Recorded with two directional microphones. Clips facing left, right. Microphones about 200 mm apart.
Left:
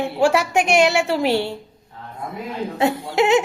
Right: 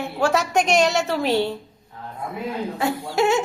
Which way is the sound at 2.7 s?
20° left (ahead or behind).